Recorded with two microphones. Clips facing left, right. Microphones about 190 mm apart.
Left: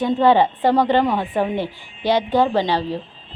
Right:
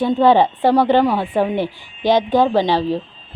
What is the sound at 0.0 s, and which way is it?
Speech, 10° right (ahead or behind).